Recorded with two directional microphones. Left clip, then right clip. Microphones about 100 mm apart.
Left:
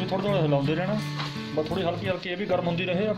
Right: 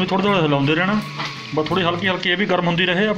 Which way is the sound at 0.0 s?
20° left (ahead or behind).